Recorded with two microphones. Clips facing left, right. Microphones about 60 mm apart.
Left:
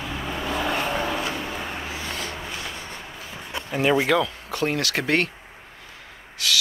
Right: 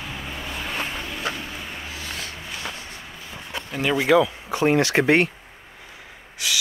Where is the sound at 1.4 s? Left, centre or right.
Left.